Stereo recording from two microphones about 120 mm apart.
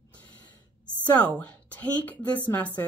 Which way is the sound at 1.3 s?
10° left (ahead or behind).